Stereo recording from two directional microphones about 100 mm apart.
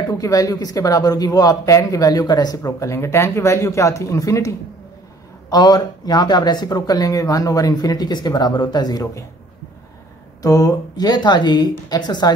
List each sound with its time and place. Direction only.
0.1 s a man's voice: 35° left (ahead or behind)
10.4 s a woman's voice: 35° left (ahead or behind)